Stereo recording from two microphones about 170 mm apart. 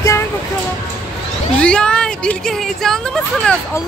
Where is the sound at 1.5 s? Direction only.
5° left (ahead or behind).